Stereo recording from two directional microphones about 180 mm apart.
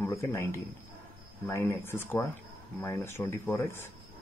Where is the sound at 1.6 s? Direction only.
15° left (ahead or behind).